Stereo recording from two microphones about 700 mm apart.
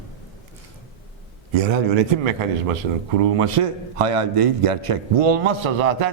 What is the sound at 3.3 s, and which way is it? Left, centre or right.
A man's voice, right.